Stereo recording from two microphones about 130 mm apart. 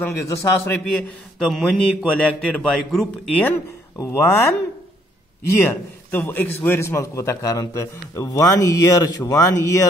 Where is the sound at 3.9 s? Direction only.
20° left (ahead or behind).